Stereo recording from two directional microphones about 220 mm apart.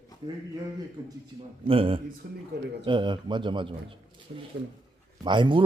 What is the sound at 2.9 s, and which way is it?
A man's voice, 20° right (ahead or behind).